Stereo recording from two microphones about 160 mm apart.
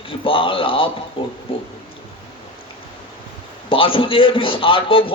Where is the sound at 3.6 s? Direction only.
35° left (ahead or behind).